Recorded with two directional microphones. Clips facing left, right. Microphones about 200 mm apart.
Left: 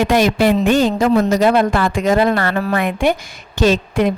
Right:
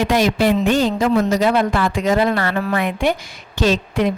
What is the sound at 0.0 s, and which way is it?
Speech, 50° left (ahead or behind).